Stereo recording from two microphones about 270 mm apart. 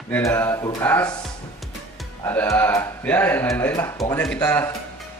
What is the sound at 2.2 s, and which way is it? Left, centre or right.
Speech, centre.